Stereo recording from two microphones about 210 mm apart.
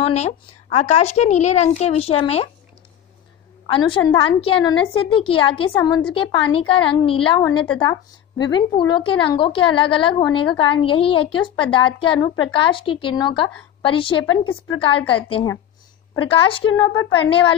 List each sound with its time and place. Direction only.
0.0 s a woman's voice: 30° left (ahead or behind)
3.6 s a woman's voice: 25° left (ahead or behind)
14.2 s a woman's voice: 70° left (ahead or behind)
14.8 s a woman's voice: 25° left (ahead or behind)